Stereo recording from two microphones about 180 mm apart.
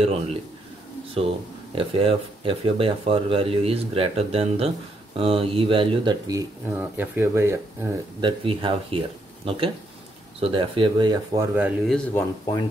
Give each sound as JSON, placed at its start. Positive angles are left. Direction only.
{"t": 0.0, "sound": "speech", "side_deg": -35}
{"t": 8.2, "sound": "speech", "side_deg": -30}
{"t": 11.9, "sound": "speech", "side_deg": 10}